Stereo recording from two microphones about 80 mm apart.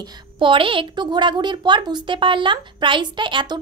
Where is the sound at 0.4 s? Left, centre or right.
Right.